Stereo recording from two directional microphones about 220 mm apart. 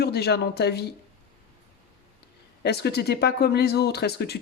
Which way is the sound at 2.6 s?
50° left (ahead or behind).